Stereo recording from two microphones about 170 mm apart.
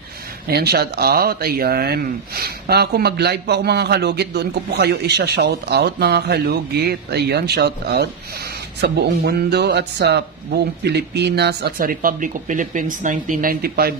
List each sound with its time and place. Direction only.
0.5 s speech: 70° right (ahead or behind)
8.8 s speech: 85° right; by 13.9 s 60° right (ahead or behind)